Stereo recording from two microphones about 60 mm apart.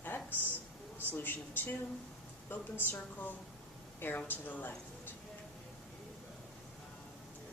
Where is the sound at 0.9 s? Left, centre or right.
Left.